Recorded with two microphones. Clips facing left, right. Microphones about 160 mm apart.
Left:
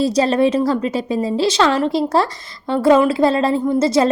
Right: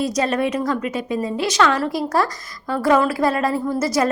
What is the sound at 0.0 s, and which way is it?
A woman's voice, 30° left (ahead or behind).